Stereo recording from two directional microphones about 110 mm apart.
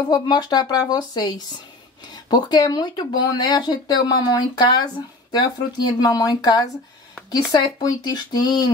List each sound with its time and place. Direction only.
0.1 s speech: 40° left (ahead or behind)
5.9 s speech: 40° left (ahead or behind)